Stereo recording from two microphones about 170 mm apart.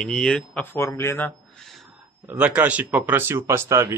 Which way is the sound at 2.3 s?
10° right (ahead or behind).